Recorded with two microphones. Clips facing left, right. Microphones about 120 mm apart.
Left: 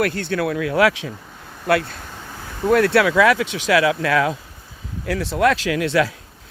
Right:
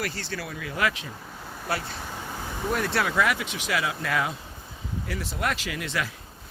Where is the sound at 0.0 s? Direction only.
55° left (ahead or behind); by 1.1 s 90° left.